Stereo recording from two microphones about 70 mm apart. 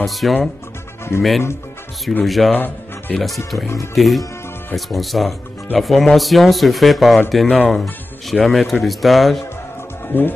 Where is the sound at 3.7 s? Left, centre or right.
Left.